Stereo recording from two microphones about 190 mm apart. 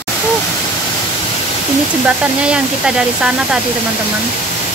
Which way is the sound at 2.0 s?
5° right (ahead or behind).